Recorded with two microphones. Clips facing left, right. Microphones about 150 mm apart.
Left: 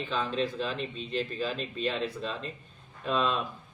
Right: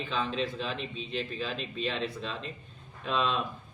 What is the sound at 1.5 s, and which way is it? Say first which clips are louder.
Speech: left 1 dB; 40° left (ahead or behind).